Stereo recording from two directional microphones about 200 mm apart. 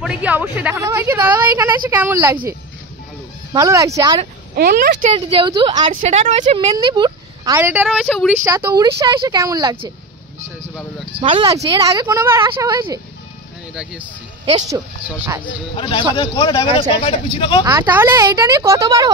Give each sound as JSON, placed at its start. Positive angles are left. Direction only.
{"t": 0.0, "sound": "a woman's voice", "side_deg": -5}
{"t": 3.5, "sound": "a woman's voice", "side_deg": -15}
{"t": 4.6, "sound": "speech", "side_deg": -45}
{"t": 5.1, "sound": "a woman's voice", "side_deg": -25}
{"t": 6.0, "sound": "speech", "side_deg": -35}
{"t": 6.7, "sound": "speech", "side_deg": -20}
{"t": 7.5, "sound": "speech", "side_deg": -10}
{"t": 8.5, "sound": "a woman's voice", "side_deg": -15}
{"t": 11.1, "sound": "a woman's voice", "side_deg": -25}
{"t": 14.4, "sound": "speech", "side_deg": -20}
{"t": 15.0, "sound": "a woman's voice", "side_deg": -10}
{"t": 15.7, "sound": "speech", "side_deg": 25}
{"t": 17.6, "sound": "a woman's voice", "side_deg": -10}